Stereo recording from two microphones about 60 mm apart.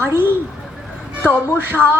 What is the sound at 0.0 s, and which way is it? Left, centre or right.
Speech, right.